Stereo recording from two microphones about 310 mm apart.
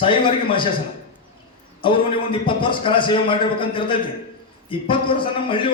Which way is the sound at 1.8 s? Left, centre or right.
Centre.